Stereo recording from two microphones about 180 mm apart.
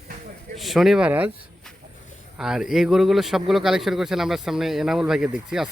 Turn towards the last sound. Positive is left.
turn(degrees=-5)  # may be behind; listen again after turning